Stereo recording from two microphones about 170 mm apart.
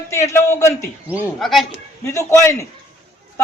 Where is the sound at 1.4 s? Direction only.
Centre (ahead or behind).